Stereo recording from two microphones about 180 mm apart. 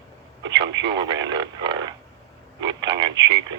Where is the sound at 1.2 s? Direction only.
25° right (ahead or behind).